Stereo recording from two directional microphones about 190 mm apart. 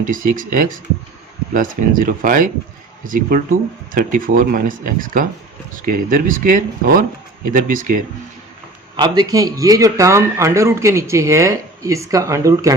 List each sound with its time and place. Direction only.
0.0 s speech: 45° right (ahead or behind)
9.0 s a man's voice: 20° right (ahead or behind)